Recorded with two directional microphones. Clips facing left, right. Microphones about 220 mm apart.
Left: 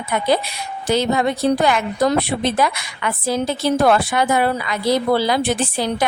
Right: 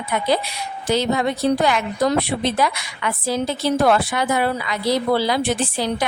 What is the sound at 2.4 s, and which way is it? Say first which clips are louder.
A woman's voice: left 2 dB; 50° left (ahead or behind).